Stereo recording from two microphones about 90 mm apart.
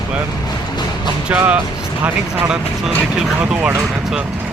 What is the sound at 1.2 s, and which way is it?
Speech, 15° right (ahead or behind).